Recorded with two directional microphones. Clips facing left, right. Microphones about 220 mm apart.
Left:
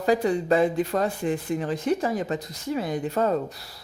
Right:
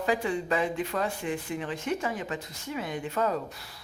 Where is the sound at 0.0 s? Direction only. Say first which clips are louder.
Left 6 dB; 40° left (ahead or behind).